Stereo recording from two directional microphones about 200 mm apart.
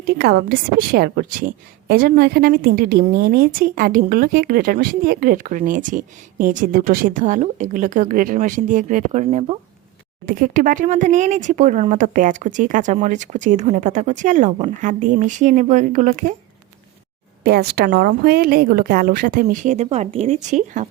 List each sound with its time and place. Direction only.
0.0 s a woman's voice: 55° right (ahead or behind)
17.4 s a woman's voice: 55° right (ahead or behind); by 20.8 s 35° right (ahead or behind)